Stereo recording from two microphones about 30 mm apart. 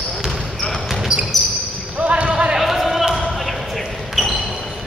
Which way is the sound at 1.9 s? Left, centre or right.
Right.